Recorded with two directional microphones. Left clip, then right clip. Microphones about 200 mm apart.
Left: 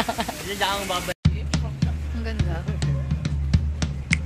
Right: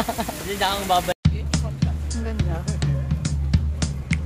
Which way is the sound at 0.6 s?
60° right (ahead or behind).